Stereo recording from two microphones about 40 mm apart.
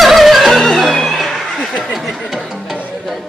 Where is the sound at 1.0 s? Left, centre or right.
Centre.